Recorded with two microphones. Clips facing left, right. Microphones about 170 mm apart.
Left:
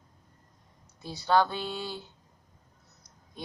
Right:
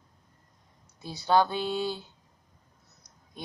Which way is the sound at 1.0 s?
15° right (ahead or behind).